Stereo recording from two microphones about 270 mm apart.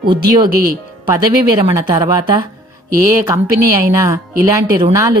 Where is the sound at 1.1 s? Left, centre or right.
Centre.